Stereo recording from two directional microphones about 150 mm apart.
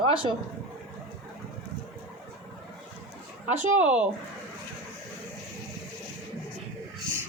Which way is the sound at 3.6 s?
10° right (ahead or behind).